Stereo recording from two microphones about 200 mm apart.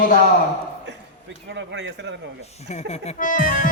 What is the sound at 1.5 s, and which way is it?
Speech, 60° right (ahead or behind).